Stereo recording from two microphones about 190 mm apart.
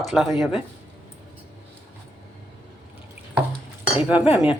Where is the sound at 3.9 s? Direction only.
10° right (ahead or behind).